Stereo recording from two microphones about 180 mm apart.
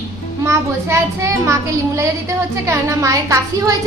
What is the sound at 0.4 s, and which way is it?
A woman's voice, 15° right (ahead or behind).